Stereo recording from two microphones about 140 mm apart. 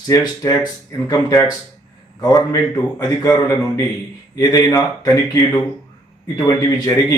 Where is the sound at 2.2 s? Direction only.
25° left (ahead or behind).